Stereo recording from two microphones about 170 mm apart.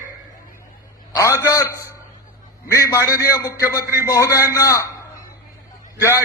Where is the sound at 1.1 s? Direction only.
15° left (ahead or behind).